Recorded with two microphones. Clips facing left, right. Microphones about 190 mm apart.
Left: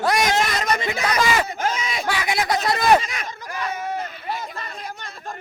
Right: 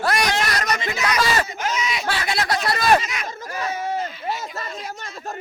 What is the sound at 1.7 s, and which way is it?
Speech, 50° left (ahead or behind).